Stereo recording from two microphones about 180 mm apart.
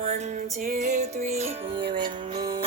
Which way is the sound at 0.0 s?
40° right (ahead or behind).